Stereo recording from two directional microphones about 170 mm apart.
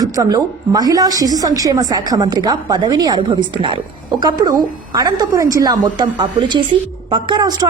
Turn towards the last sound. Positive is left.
turn(degrees=-25)  # may be behind; listen again after turning